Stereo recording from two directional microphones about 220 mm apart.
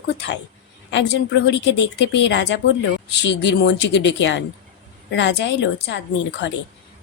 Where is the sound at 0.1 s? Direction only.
50° left (ahead or behind).